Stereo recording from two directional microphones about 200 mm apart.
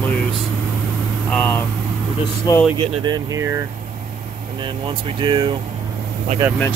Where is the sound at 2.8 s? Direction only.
20° right (ahead or behind).